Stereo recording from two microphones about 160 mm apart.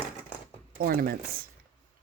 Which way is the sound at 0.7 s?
65° right (ahead or behind).